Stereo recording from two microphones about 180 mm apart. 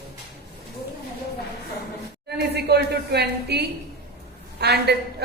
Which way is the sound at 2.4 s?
65° right (ahead or behind).